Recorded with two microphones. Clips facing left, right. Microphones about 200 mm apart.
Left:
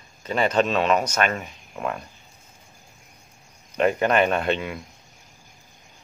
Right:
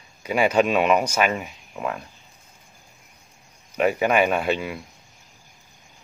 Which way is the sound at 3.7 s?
5° right (ahead or behind).